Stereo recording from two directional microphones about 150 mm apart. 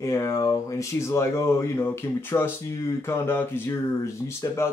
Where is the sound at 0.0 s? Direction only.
20° left (ahead or behind).